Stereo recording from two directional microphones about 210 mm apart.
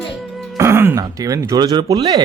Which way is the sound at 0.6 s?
10° right (ahead or behind).